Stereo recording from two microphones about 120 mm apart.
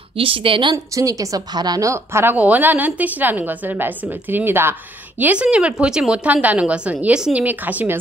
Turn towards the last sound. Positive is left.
turn(degrees=-15)  # may be behind; listen again after turning